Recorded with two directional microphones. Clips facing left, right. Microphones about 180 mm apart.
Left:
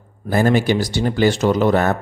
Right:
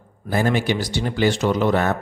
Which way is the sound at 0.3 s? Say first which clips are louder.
Left 4 dB; 45° left (ahead or behind).